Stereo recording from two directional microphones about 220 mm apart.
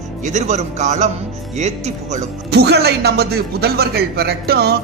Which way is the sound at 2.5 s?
50° right (ahead or behind).